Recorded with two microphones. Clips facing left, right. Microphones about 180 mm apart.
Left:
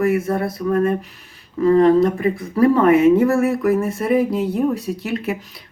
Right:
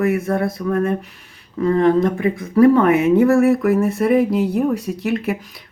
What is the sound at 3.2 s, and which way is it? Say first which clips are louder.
Speech: right 3 dB; centre (ahead or behind).